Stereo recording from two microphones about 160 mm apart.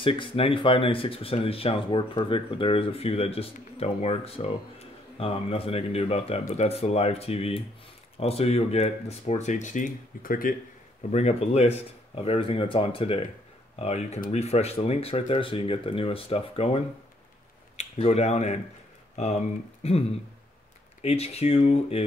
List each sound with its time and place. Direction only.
0.0 s speech: 30° left (ahead or behind); by 10.5 s 60° left (ahead or behind)
11.0 s speech: 45° left (ahead or behind)